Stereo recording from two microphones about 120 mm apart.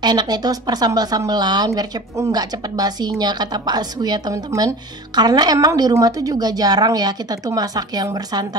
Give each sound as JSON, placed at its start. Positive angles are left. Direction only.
{"t": 0.0, "sound": "speech", "side_deg": -35}